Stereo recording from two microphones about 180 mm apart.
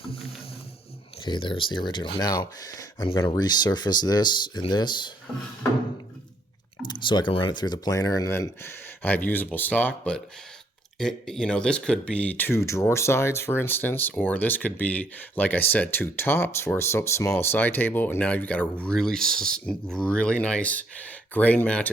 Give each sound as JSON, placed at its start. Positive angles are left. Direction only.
{"t": 1.2, "sound": "speech", "side_deg": 25}
{"t": 7.0, "sound": "speech", "side_deg": 25}